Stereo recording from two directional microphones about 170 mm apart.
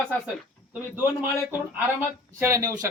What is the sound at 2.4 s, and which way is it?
Speech, 20° right (ahead or behind).